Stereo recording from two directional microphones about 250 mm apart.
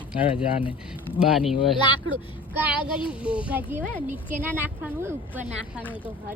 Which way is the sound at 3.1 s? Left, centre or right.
Centre.